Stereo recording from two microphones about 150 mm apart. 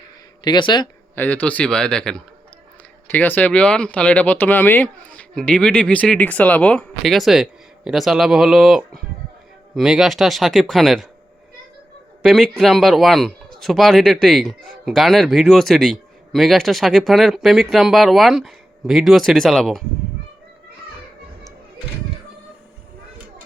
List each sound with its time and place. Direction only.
0.4 s speech: 30° left (ahead or behind)
1.1 s speech: 10° left (ahead or behind)
12.2 s speech: centre (ahead or behind)